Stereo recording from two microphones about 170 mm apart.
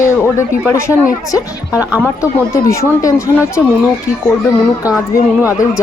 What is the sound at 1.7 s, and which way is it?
Speech, 10° right (ahead or behind).